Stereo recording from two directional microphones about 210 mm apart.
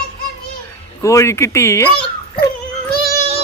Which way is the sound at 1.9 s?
25° left (ahead or behind).